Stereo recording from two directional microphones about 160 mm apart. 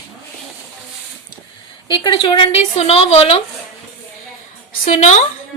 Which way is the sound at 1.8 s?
30° left (ahead or behind).